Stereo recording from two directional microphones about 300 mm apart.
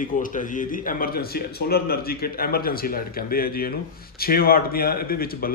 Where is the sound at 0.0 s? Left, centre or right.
Left.